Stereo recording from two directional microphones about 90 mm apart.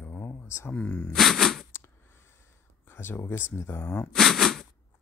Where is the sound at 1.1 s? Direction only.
Centre (ahead or behind).